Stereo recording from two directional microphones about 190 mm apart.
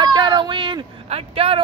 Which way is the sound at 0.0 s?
25° right (ahead or behind).